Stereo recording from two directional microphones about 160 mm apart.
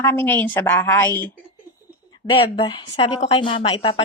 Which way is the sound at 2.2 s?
35° left (ahead or behind).